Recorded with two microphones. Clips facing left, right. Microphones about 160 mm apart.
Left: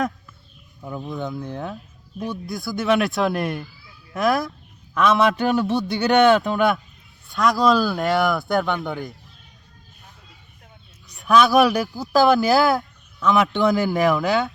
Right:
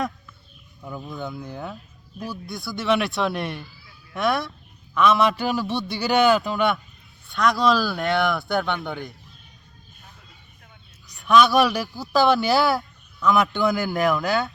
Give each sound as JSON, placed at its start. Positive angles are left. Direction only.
{"t": 0.8, "sound": "speech", "side_deg": 5}
{"t": 11.1, "sound": "speech", "side_deg": 0}